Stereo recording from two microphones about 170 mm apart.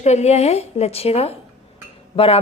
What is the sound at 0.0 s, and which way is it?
A woman's voice, 40° left (ahead or behind).